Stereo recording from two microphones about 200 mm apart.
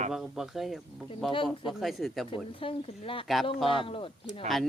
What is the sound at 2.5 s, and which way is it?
Speech, 25° left (ahead or behind).